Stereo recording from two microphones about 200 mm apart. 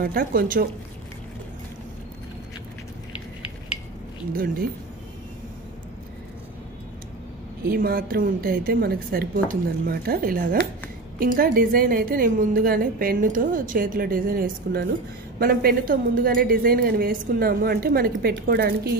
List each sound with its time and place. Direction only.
0.0 s a woman's voice: 50° right (ahead or behind)
4.3 s a woman's voice: 45° right (ahead or behind)
7.6 s a woman's voice: 50° right (ahead or behind)